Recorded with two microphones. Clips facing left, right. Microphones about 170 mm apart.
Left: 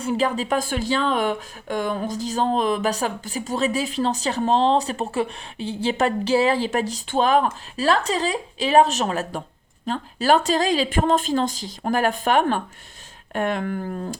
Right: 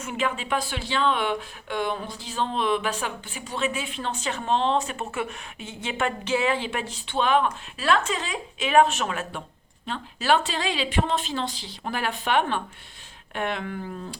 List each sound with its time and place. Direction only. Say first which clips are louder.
0.0 s speech: left 6 dB; 35° left (ahead or behind)